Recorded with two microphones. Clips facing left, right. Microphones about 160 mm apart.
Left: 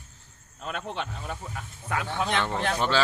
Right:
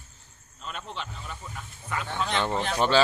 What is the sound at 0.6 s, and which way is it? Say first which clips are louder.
Speech: left 4 dB; 60° left (ahead or behind).